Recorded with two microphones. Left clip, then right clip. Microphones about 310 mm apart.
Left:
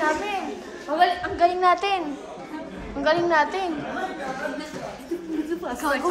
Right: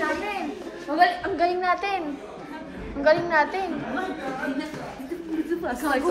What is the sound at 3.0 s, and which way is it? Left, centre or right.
Speech, centre.